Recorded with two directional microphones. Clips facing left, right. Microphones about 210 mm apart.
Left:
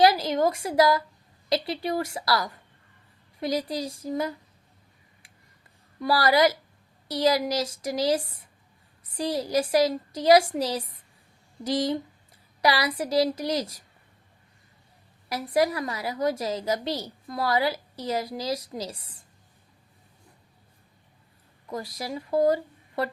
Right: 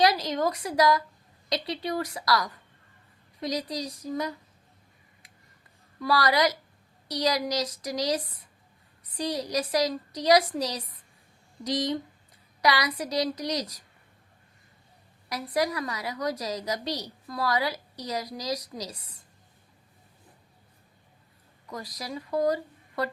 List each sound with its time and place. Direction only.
0.0 s a woman's voice: 30° left (ahead or behind)
6.0 s a woman's voice: 30° left (ahead or behind)
15.3 s a woman's voice: 30° left (ahead or behind)
21.7 s speech: 30° left (ahead or behind)